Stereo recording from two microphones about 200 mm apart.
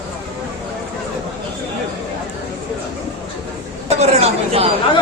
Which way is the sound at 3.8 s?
35° right (ahead or behind).